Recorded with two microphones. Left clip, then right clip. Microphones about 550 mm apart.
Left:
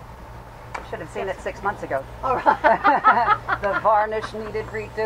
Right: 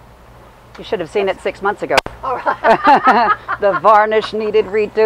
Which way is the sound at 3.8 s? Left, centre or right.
Right.